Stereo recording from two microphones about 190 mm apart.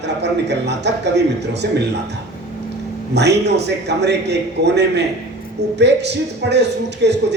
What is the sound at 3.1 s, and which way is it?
A man's voice, 65° right (ahead or behind).